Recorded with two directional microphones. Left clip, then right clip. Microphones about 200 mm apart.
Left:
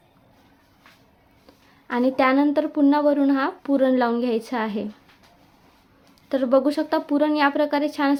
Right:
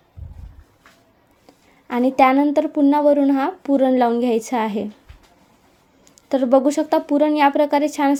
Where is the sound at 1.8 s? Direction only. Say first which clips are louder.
Right 5 dB; 10° right (ahead or behind).